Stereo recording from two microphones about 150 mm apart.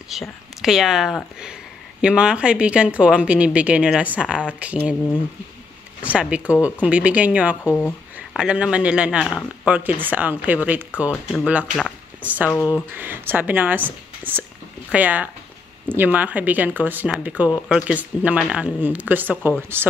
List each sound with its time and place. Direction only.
0.1 s speech: centre (ahead or behind)
6.0 s speech: 10° right (ahead or behind)
7.7 s a sound: 10° left (ahead or behind)
8.4 s speech: 5° right (ahead or behind)
12.4 s speech: 15° left (ahead or behind)
12.9 s speech: 15° right (ahead or behind)